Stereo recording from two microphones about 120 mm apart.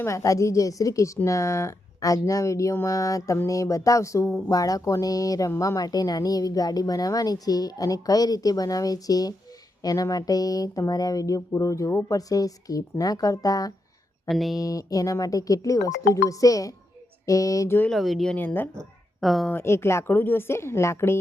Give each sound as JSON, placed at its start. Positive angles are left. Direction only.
{"t": 0.0, "sound": "a woman's voice", "side_deg": 25}
{"t": 14.3, "sound": "speech", "side_deg": 0}
{"t": 14.6, "sound": "speech", "side_deg": 30}
{"t": 17.9, "sound": "speech", "side_deg": 0}
{"t": 18.3, "sound": "speech", "side_deg": 15}
{"t": 19.2, "sound": "speech", "side_deg": 0}
{"t": 19.5, "sound": "speech", "side_deg": 20}